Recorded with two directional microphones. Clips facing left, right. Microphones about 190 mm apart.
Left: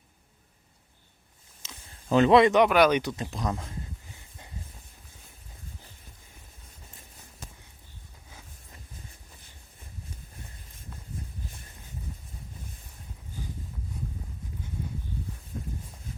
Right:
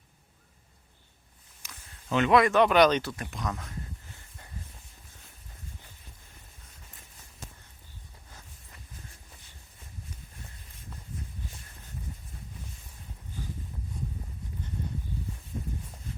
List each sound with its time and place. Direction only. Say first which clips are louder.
1.6 s a sound: left 2 dB; 20° left (ahead or behind)
2.0 s a man's voice: left 4 dB; 35° left (ahead or behind)
2.6 s speech: left 1 dB; 5° left (ahead or behind)
3.2 s a man's voice: left 3 dB; 30° left (ahead or behind)